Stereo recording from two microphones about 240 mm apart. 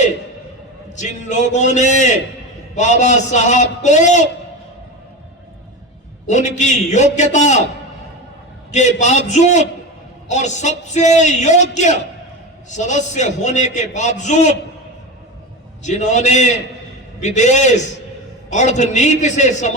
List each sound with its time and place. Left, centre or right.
0.9 s a man's voice: left
6.2 s a man's voice: left
9.0 s a man's voice: left
15.8 s a man's voice: left